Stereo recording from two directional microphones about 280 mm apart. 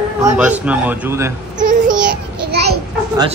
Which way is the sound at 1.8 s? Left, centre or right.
Centre.